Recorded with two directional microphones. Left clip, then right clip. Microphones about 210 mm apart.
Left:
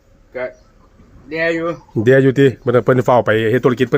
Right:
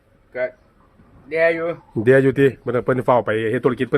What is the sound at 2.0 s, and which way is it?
Speech, 10° left (ahead or behind).